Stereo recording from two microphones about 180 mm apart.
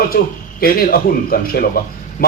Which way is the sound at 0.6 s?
55° left (ahead or behind).